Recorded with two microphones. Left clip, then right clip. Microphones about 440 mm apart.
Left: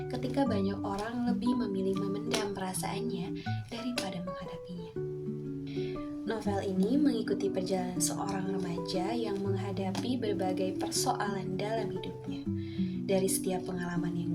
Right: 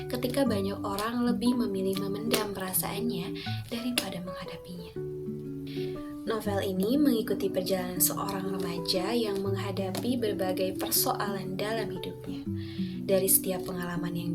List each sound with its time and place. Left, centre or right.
0.1 s speech: right
6.2 s speech: right
13.1 s speech: right